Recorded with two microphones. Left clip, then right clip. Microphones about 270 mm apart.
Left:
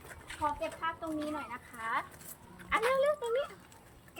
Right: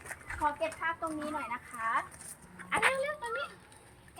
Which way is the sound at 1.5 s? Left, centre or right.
Centre.